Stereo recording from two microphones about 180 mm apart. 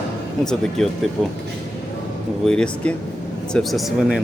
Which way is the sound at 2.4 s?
5° left (ahead or behind).